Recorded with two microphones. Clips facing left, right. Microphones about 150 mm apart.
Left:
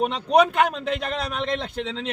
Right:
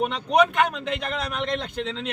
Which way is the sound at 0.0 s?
30° left (ahead or behind).